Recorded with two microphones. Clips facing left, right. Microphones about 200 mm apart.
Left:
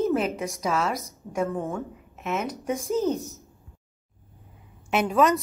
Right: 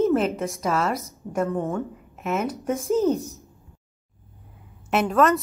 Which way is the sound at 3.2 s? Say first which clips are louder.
Right 2 dB; 15° right (ahead or behind).